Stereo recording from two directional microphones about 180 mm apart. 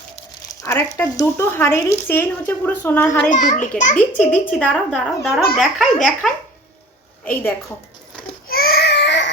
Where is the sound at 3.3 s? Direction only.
45° left (ahead or behind).